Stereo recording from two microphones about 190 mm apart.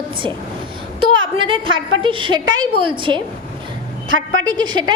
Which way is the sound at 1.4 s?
25° right (ahead or behind).